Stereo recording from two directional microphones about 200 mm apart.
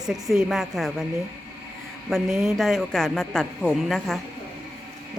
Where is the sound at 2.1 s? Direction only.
Centre (ahead or behind).